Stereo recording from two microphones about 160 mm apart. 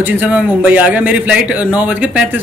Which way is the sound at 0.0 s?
10° right (ahead or behind).